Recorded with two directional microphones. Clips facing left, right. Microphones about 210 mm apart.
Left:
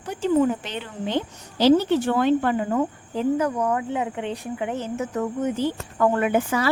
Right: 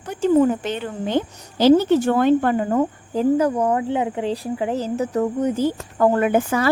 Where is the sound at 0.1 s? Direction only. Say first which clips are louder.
Right 4 dB; 45° right (ahead or behind).